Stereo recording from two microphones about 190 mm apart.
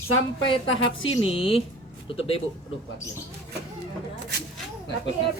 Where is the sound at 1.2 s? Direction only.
30° left (ahead or behind).